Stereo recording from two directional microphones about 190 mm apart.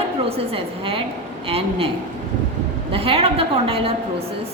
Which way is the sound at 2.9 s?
30° right (ahead or behind).